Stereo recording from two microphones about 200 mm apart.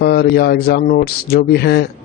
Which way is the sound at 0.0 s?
55° left (ahead or behind).